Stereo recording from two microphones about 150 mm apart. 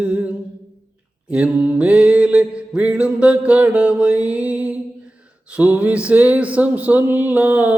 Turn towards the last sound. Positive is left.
turn(degrees=-10)  # may be behind; listen again after turning